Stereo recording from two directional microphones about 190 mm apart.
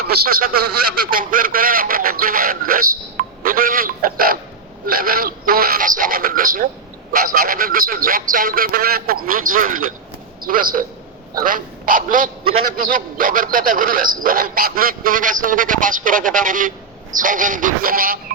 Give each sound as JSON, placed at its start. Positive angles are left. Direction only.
{"t": 0.0, "sound": "a man's voice", "side_deg": -55}